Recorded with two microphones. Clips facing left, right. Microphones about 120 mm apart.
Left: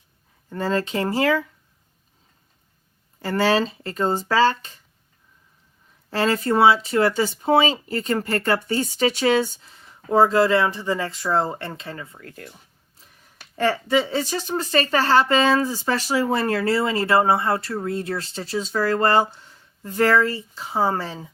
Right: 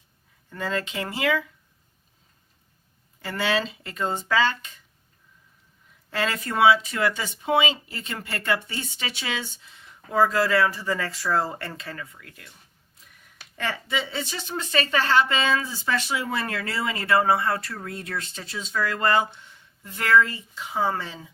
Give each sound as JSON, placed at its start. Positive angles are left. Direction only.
{"t": 0.5, "sound": "a woman's voice", "side_deg": 35}
{"t": 3.2, "sound": "a woman's voice", "side_deg": 40}
{"t": 6.1, "sound": "a woman's voice", "side_deg": 35}
{"t": 13.0, "sound": "a sound", "side_deg": 30}
{"t": 13.6, "sound": "a woman's voice", "side_deg": 40}